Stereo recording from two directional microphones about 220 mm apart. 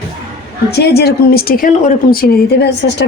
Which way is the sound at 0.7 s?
45° left (ahead or behind).